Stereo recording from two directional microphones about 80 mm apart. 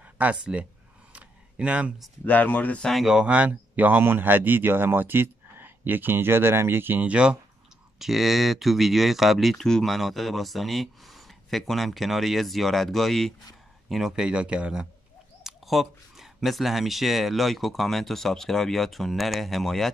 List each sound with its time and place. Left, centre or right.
0.0 s speech: centre
1.1 s a sound: centre
2.2 s speech: centre
2.9 s speech: centre
3.3 s speech: centre
8.0 s speech: centre